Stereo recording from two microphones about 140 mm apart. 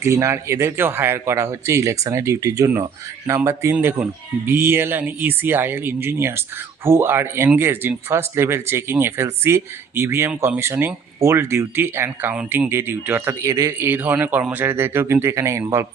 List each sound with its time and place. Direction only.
0.0 s speech: 20° right (ahead or behind)